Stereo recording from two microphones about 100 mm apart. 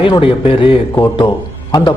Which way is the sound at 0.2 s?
65° left (ahead or behind).